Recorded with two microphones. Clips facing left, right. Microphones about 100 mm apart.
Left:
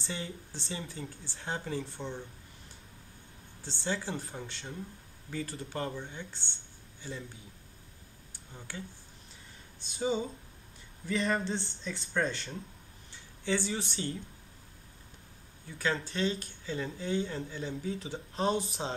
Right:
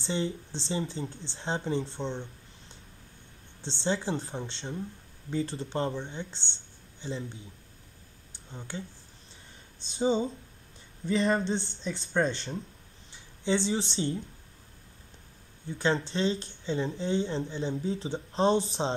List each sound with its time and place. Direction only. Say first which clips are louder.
0.0 s speech: right 8 dB; 25° right (ahead or behind)
3.6 s speech: right 5 dB; 25° right (ahead or behind)
8.3 s a sound: right 5 dB; 25° right (ahead or behind)
9.8 s speech: right 5 dB; 25° right (ahead or behind)
15.8 s speech: right 4 dB; 25° right (ahead or behind)